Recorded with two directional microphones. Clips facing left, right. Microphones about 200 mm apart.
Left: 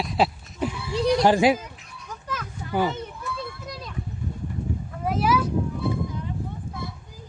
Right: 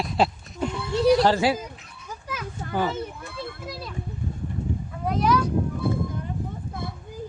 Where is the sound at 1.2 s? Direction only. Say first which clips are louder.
Left 3 dB; 15° left (ahead or behind).